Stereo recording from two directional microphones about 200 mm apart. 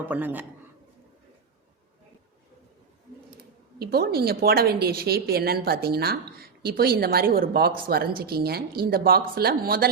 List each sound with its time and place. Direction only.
0.0 s a man's voice: 10° right (ahead or behind)
3.8 s a woman's voice: 50° right (ahead or behind)